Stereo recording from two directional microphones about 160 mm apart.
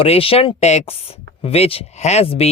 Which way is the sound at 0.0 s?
35° left (ahead or behind).